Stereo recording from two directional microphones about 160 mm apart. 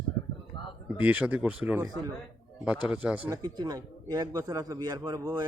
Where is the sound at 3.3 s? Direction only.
25° right (ahead or behind).